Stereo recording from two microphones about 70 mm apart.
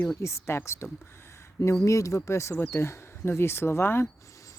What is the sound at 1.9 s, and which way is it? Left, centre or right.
Speech, left.